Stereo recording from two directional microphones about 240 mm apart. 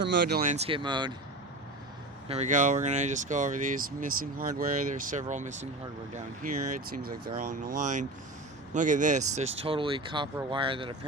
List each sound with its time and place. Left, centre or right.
0.3 s speech: right; by 1.1 s centre
2.2 s speech: right
6.9 s speech: right